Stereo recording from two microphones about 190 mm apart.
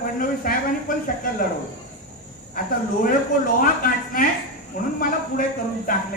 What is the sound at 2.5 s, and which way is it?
Speech, 45° left (ahead or behind).